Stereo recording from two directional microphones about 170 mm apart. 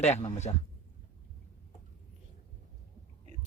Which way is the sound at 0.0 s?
35° left (ahead or behind).